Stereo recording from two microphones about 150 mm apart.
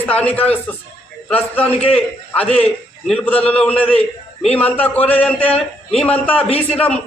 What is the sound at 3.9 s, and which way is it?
Speech, 40° left (ahead or behind).